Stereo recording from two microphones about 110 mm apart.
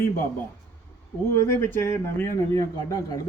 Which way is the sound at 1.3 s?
20° left (ahead or behind).